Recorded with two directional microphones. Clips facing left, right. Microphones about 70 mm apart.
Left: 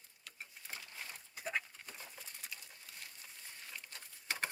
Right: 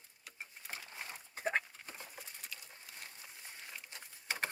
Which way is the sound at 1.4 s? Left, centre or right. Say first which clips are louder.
Right 5 dB; right.